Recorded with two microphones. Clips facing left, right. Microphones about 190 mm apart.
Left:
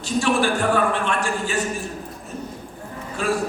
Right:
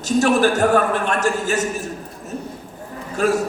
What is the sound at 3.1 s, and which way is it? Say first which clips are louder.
Speech: right 5 dB; 45° right (ahead or behind).